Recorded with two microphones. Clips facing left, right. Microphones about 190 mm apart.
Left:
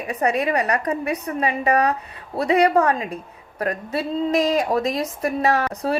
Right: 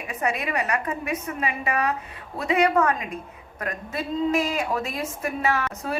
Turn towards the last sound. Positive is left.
turn(degrees=35)  # may be behind; listen again after turning